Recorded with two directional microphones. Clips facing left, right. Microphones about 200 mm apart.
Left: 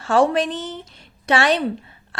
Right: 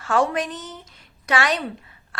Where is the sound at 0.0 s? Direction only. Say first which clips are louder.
Left 4 dB; 30° left (ahead or behind).